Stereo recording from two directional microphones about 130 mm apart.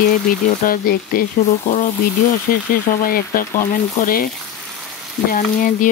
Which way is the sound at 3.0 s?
90° left.